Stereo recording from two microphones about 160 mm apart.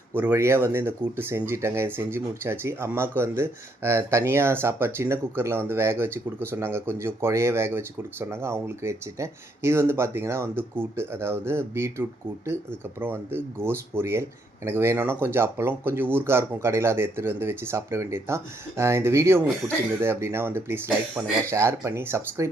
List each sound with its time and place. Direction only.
0.2 s speech: 15° right (ahead or behind)